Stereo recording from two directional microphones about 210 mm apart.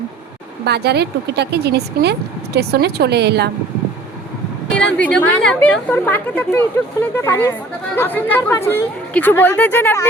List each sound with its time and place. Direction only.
0.6 s speech: 50° right (ahead or behind)
4.7 s a woman's voice: 5° left (ahead or behind)